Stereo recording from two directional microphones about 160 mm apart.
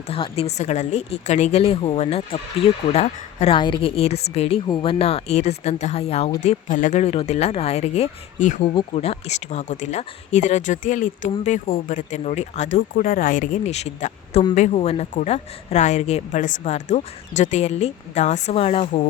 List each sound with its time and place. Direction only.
0.1 s a woman's voice: 35° left (ahead or behind)
8.6 s a woman's voice: 35° left (ahead or behind)